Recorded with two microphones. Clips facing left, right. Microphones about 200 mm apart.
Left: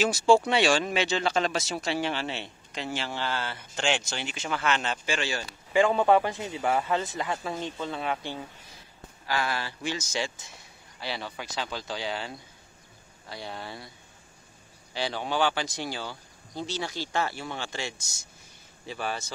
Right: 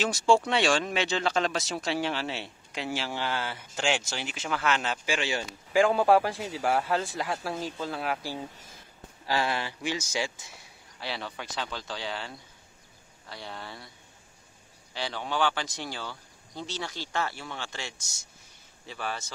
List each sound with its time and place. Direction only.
0.0 s speech: 5° left (ahead or behind); by 5.5 s 15° right (ahead or behind)
5.7 s speech: centre (ahead or behind)
8.5 s a sound: 50° right (ahead or behind)
9.2 s speech: 30° right (ahead or behind); by 10.6 s 10° right (ahead or behind)
11.0 s speech: centre (ahead or behind)
15.2 s speech: 10° left (ahead or behind)